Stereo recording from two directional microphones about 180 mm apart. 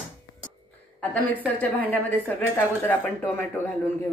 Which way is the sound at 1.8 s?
10° left (ahead or behind).